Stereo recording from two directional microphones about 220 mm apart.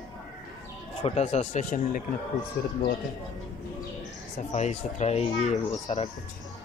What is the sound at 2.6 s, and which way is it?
Speech, 45° left (ahead or behind).